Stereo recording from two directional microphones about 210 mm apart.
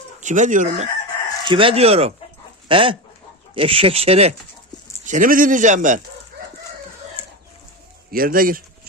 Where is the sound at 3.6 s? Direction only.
25° right (ahead or behind).